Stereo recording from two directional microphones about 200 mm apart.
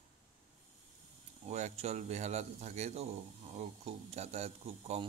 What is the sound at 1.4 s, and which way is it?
Speech, 35° right (ahead or behind).